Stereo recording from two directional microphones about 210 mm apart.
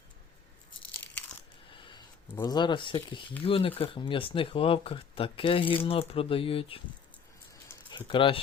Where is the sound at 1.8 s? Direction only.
25° left (ahead or behind).